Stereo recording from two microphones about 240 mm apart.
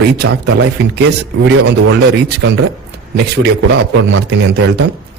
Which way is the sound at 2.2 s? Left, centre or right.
Right.